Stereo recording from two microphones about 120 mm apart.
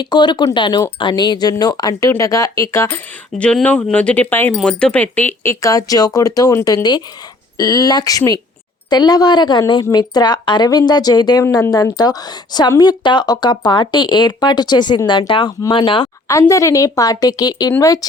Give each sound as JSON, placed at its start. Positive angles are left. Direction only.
{"t": 0.0, "sound": "speech", "side_deg": 40}
{"t": 3.3, "sound": "speech", "side_deg": 10}
{"t": 16.3, "sound": "speech", "side_deg": 25}